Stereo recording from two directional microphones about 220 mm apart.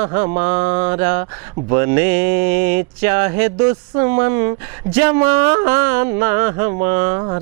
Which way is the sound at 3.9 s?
25° right (ahead or behind).